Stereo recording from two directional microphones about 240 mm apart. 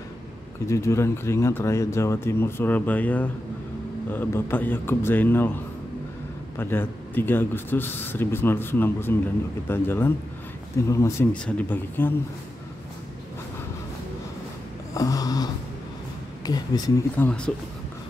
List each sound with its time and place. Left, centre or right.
0.7 s speech: centre
6.6 s speech: centre
15.0 s a sound: centre
16.4 s speech: centre